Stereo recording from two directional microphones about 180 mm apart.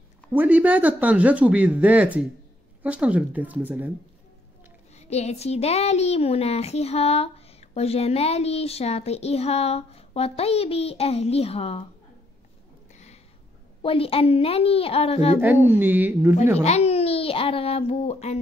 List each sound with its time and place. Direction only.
0.3 s speech: 10° right (ahead or behind)
4.9 s a woman's voice: 35° left (ahead or behind)
13.8 s a woman's voice: 30° left (ahead or behind)
15.4 s speech: 10° right (ahead or behind)
16.6 s a woman's voice: 35° left (ahead or behind)